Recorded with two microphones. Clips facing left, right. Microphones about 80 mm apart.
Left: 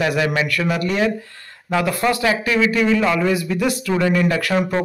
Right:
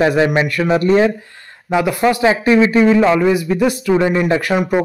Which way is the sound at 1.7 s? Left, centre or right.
Centre.